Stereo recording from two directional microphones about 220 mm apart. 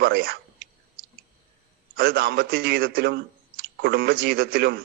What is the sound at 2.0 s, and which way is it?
A man's voice, 45° right (ahead or behind).